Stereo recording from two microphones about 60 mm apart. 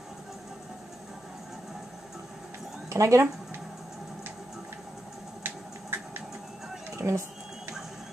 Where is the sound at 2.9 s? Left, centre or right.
Right.